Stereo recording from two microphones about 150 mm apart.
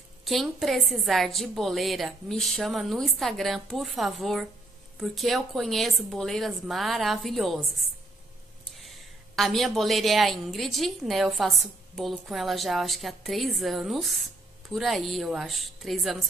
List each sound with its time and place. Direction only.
0.2 s a woman's voice: centre (ahead or behind)
8.7 s a woman's voice: centre (ahead or behind)